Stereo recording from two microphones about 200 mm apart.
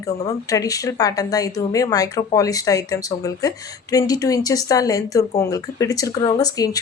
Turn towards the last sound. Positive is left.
turn(degrees=20)  # may be behind; listen again after turning